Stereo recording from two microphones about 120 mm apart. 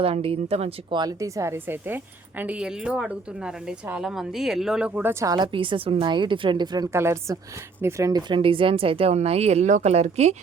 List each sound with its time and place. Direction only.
0.0 s a woman's voice: 50° right (ahead or behind)
0.9 s a woman's voice: 35° right (ahead or behind); by 5.1 s 10° right (ahead or behind)
5.2 s a woman's voice: 30° right (ahead or behind)
5.5 s a woman's voice: 45° right (ahead or behind)
6.9 s speech: 20° right (ahead or behind)
8.3 s a woman's voice: 45° right (ahead or behind); by 10.3 s 65° right (ahead or behind)